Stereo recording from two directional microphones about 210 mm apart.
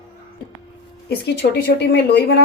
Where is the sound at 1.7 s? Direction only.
50° left (ahead or behind).